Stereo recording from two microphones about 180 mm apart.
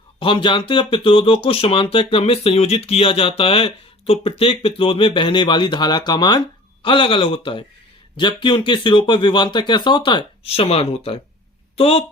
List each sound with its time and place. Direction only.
0.2 s speech: 30° left (ahead or behind)